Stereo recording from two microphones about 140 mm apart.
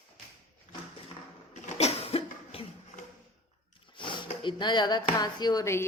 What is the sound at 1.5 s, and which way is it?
Cough, 50° left (ahead or behind).